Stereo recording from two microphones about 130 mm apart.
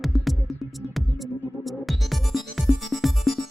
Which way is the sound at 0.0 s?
Centre (ahead or behind).